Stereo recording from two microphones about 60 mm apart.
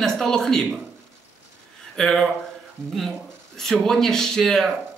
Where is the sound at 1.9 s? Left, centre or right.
Centre.